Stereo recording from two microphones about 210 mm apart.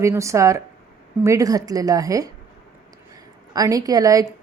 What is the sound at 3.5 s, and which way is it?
Speech, 15° right (ahead or behind).